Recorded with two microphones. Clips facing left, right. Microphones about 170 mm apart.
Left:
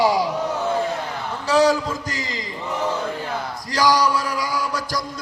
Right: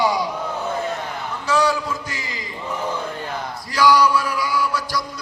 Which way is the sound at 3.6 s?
40° left (ahead or behind).